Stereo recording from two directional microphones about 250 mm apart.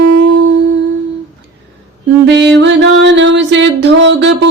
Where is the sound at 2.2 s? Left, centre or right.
Right.